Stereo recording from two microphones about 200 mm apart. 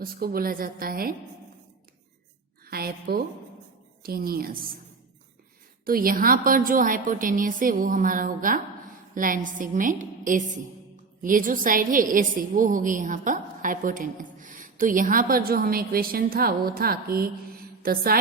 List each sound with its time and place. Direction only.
0.0 s a woman's voice: 50° right (ahead or behind)
2.6 s a sound: 50° right (ahead or behind)
4.0 s a woman's voice: 50° right (ahead or behind)
5.8 s a woman's voice: 45° right (ahead or behind)